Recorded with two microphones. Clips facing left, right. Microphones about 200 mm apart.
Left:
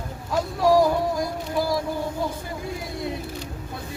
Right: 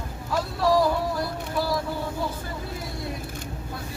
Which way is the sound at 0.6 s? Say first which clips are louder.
Left 3 dB; 15° left (ahead or behind).